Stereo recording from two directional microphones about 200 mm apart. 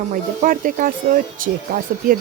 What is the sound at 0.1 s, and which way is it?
Speech, 45° right (ahead or behind).